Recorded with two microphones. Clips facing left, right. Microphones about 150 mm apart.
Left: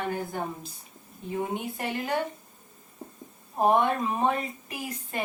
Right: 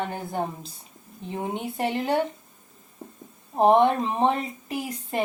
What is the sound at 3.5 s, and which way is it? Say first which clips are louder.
A woman's voice: right 5 dB; 25° right (ahead or behind).